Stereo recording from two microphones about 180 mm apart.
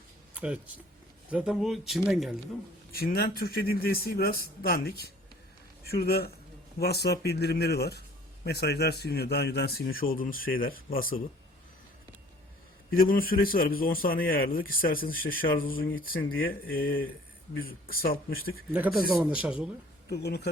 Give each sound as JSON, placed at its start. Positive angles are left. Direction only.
{"t": 0.3, "sound": "speech", "side_deg": -5}
{"t": 2.9, "sound": "a man's voice", "side_deg": 60}
{"t": 13.0, "sound": "a man's voice", "side_deg": 50}
{"t": 18.7, "sound": "speech", "side_deg": -10}
{"t": 20.1, "sound": "a man's voice", "side_deg": 65}